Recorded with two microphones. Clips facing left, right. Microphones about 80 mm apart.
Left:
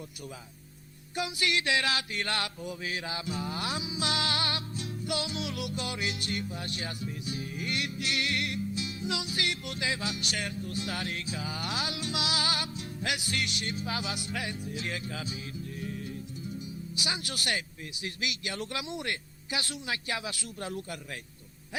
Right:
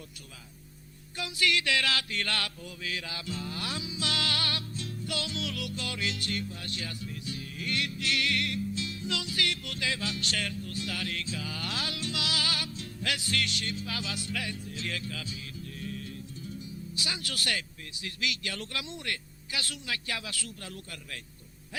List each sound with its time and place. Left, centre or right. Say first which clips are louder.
1.1 s chant: even; left
18.0 s speech: even; left